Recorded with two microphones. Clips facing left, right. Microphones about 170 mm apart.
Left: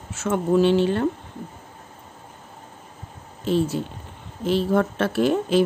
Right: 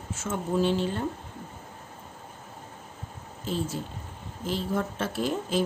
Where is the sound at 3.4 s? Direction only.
70° left (ahead or behind).